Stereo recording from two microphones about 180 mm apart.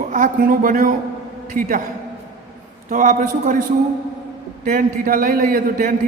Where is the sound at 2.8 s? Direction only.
45° right (ahead or behind).